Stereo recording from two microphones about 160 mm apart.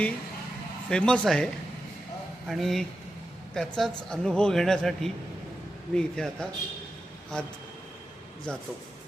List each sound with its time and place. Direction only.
0.9 s speech: 5° left (ahead or behind)
2.5 s speech: centre (ahead or behind)